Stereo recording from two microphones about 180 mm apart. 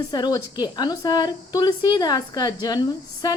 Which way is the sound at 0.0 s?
20° left (ahead or behind).